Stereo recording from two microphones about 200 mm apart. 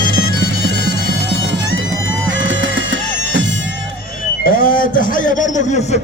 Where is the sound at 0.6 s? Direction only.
60° right (ahead or behind).